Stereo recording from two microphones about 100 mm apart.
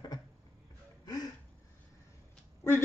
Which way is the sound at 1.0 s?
40° left (ahead or behind).